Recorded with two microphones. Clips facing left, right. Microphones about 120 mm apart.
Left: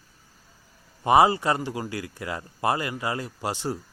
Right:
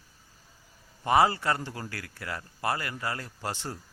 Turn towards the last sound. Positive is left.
turn(degrees=15)  # may be behind; listen again after turning